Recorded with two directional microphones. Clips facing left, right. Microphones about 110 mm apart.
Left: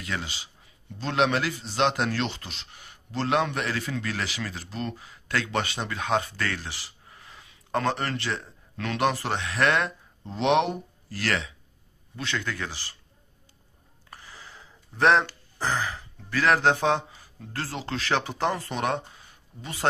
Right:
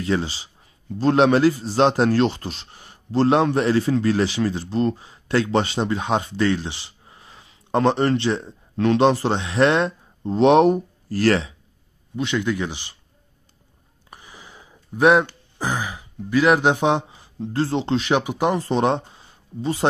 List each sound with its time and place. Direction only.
0.0 s a man's voice: 30° right (ahead or behind)
10.2 s speech: 40° right (ahead or behind)
12.2 s speech: 15° right (ahead or behind)
14.1 s speech: 15° right (ahead or behind)
18.6 s speech: 25° right (ahead or behind)